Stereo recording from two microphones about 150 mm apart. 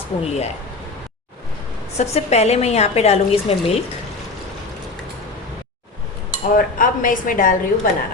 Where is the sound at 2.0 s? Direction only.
45° left (ahead or behind).